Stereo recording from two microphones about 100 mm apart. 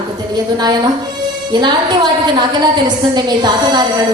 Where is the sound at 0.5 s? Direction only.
45° right (ahead or behind).